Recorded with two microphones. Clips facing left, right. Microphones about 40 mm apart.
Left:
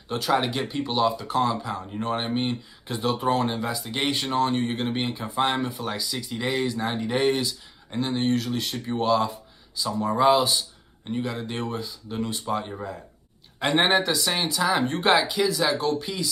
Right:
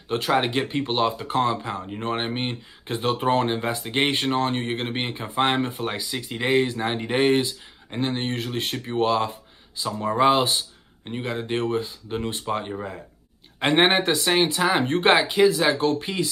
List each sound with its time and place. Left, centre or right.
0.1 s speech: right